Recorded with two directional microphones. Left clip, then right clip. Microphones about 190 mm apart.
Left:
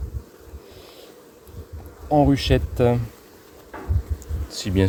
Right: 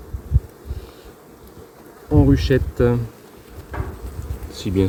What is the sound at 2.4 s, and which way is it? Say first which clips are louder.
Speech: right 2 dB; 65° left (ahead or behind).